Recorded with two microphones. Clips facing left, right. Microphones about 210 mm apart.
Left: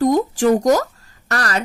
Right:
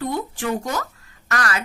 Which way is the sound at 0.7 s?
40° left (ahead or behind).